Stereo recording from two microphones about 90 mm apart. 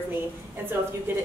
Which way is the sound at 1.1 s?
25° right (ahead or behind).